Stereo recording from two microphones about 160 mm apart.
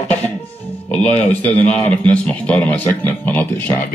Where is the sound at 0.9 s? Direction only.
10° left (ahead or behind).